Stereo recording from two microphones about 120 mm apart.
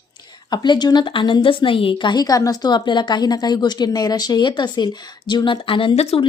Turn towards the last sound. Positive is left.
turn(degrees=55)  # may be behind; listen again after turning